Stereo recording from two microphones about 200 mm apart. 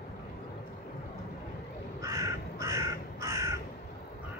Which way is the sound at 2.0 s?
15° right (ahead or behind).